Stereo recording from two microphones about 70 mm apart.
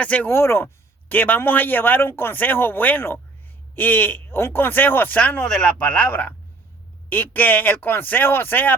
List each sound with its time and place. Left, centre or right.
0.0 s a man's voice: left
0.3 s a man's voice: left